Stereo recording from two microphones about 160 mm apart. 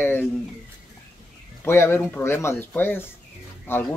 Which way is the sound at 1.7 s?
15° left (ahead or behind).